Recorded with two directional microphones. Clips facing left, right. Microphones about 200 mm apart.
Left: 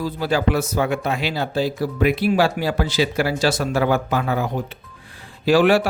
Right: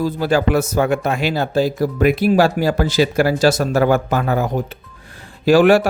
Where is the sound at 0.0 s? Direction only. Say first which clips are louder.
Right 4 dB; 45° right (ahead or behind).